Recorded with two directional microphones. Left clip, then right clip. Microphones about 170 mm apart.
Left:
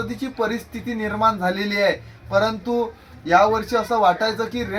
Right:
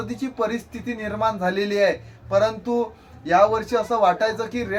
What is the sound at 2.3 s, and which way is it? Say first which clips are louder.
Speech: even; 15° right (ahead or behind).